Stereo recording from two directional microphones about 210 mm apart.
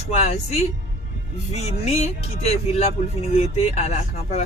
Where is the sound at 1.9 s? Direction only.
30° left (ahead or behind).